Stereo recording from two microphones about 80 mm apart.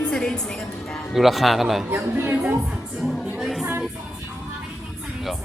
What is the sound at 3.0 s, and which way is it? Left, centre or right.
Speech, centre.